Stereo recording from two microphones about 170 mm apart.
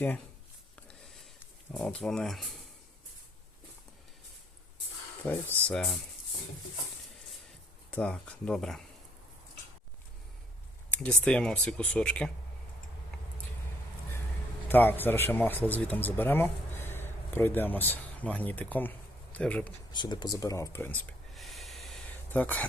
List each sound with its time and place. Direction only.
0.9 s a sound: centre (ahead or behind)
1.7 s speech: 5° left (ahead or behind)
5.3 s speech: 10° left (ahead or behind)
7.9 s speech: 5° left (ahead or behind)
10.9 s speech: 10° left (ahead or behind)
14.7 s speech: 10° left (ahead or behind)
19.9 s speech: 25° left (ahead or behind)
21.3 s a sound: centre (ahead or behind)